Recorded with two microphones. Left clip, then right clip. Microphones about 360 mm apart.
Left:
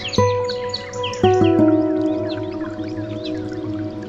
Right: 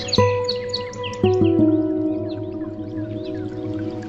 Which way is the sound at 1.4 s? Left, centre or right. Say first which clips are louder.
Left 2 dB; left.